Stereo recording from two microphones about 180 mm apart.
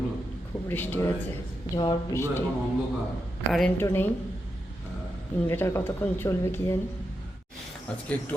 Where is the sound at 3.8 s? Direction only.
15° left (ahead or behind).